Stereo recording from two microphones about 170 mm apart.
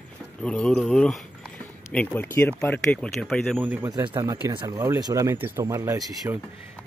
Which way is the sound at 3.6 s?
10° right (ahead or behind).